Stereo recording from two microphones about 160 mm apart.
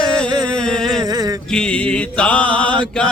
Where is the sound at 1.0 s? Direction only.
25° right (ahead or behind).